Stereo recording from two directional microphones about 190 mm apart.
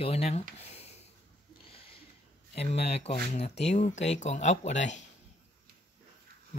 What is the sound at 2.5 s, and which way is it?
Speech, 35° left (ahead or behind).